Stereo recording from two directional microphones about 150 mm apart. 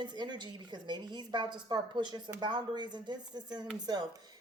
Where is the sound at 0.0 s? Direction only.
30° right (ahead or behind).